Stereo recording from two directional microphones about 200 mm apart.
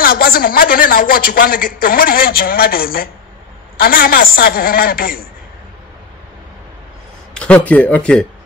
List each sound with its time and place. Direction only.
0.0 s a woman's voice: 45° left (ahead or behind)
7.3 s speech: 5° left (ahead or behind)